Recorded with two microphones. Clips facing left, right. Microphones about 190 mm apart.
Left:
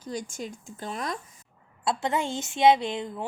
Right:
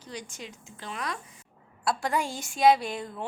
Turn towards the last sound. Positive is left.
turn(degrees=20)  # may be behind; listen again after turning